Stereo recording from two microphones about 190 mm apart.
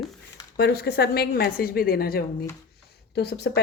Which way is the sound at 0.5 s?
55° left (ahead or behind).